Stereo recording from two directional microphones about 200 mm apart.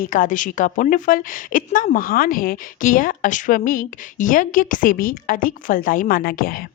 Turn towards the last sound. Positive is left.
turn(degrees=45)  # may be behind; listen again after turning